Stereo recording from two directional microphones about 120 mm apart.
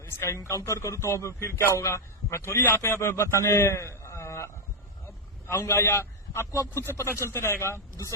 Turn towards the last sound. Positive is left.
turn(degrees=20)  # may be behind; listen again after turning